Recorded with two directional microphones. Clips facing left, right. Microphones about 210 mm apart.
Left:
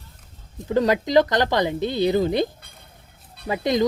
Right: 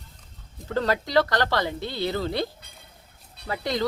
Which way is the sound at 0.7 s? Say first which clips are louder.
Left 5 dB; 15° left (ahead or behind).